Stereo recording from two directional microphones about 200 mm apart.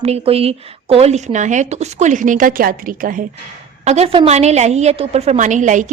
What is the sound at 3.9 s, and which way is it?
A woman's voice, 30° right (ahead or behind).